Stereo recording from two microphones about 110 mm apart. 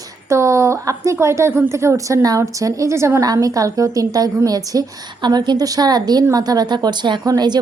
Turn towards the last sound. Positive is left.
turn(degrees=-40)  # may be behind; listen again after turning